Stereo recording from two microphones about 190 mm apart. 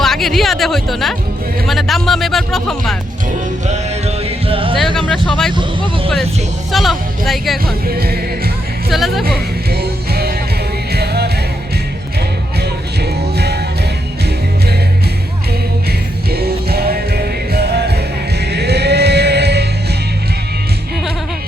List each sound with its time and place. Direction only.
0.0 s speech: centre (ahead or behind)
3.7 s music: 35° right (ahead or behind)
4.9 s speech: centre (ahead or behind)
6.7 s speech: centre (ahead or behind)
7.6 s music: 55° right (ahead or behind)
8.9 s speech: centre (ahead or behind)
9.2 s music: 55° right (ahead or behind)
12.5 s music: 60° right (ahead or behind)
15.9 s music: 55° right (ahead or behind)